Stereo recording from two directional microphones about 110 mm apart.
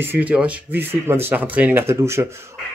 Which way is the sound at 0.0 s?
15° right (ahead or behind).